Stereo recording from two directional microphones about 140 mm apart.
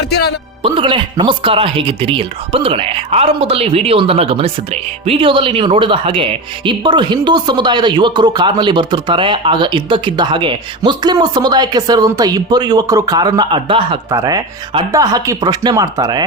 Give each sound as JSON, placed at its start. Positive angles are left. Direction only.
{"t": 0.6, "sound": "speech", "side_deg": -35}
{"t": 14.1, "sound": "speech", "side_deg": -25}